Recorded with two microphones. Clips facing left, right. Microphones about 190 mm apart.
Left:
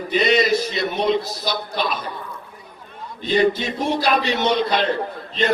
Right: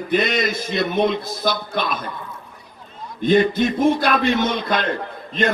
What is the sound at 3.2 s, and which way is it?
A man's voice, 50° right (ahead or behind).